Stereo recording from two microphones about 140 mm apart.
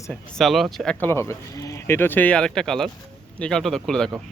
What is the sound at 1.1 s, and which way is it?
Speech, 20° left (ahead or behind).